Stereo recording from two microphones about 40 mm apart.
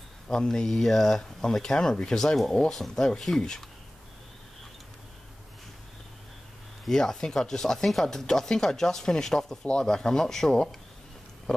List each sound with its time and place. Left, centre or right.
0.3 s speech: centre
0.7 s speech: centre
6.9 s speech: centre